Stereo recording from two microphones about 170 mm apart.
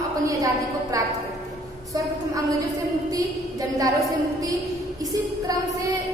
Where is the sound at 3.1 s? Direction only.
20° right (ahead or behind).